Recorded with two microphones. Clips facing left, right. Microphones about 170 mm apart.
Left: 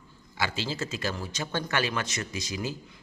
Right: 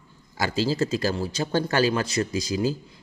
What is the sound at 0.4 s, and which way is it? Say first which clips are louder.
A man's voice: right 8 dB; 40° right (ahead or behind).